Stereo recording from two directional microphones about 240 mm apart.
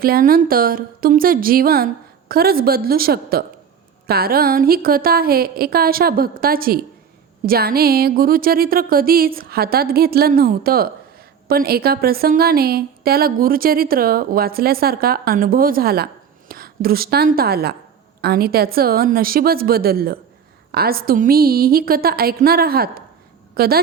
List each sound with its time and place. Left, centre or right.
0.0 s a woman's voice: right